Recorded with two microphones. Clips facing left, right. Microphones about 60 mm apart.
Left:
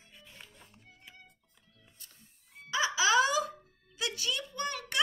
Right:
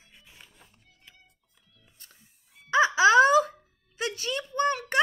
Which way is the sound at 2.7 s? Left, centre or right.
Right.